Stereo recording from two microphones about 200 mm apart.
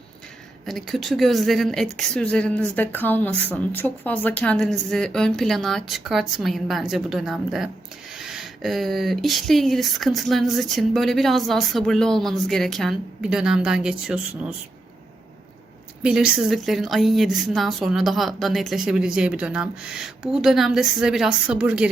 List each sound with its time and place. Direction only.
0.6 s speech: centre (ahead or behind)
16.0 s speech: 5° right (ahead or behind)